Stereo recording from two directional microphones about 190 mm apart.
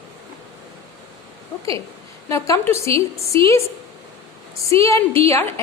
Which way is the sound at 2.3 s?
15° left (ahead or behind).